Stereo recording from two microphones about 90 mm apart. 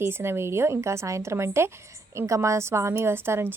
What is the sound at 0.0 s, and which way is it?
A woman's voice, 30° right (ahead or behind).